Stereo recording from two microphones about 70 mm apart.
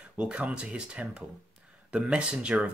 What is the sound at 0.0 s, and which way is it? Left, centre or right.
Speech, centre.